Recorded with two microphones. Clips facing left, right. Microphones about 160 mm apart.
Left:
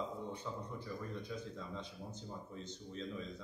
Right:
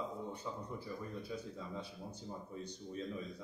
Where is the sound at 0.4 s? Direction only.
10° right (ahead or behind).